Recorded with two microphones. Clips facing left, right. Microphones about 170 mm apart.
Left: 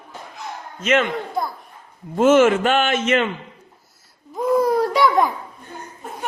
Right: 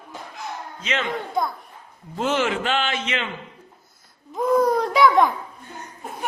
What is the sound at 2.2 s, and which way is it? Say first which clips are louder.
A man's voice: left 9 dB; 50° left (ahead or behind).